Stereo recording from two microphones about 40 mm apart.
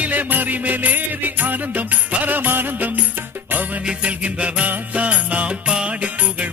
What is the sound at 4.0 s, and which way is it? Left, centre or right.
Music, right.